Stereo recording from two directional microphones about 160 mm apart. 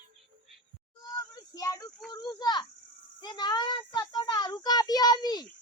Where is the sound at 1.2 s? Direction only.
20° left (ahead or behind).